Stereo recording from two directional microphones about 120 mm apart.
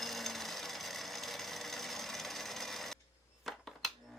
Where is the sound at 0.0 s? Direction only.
Centre (ahead or behind).